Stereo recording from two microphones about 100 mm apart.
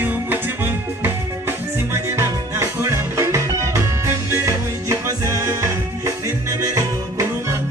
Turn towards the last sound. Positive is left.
turn(degrees=-35)  # may be behind; listen again after turning